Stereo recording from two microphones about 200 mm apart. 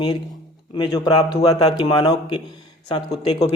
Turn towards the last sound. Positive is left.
turn(degrees=25)  # may be behind; listen again after turning